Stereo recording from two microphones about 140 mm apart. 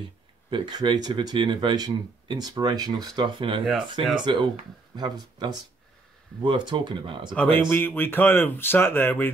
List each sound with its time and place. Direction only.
0.5 s speech: 35° right (ahead or behind)
7.3 s speech: 15° left (ahead or behind)